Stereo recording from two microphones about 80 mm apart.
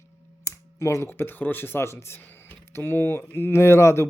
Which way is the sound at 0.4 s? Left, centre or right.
Left.